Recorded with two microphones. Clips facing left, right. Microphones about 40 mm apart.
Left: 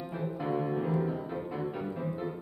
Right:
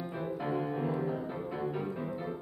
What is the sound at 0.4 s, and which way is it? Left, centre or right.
Music, centre.